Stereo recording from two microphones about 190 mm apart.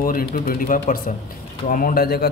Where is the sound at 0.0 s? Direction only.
50° left (ahead or behind).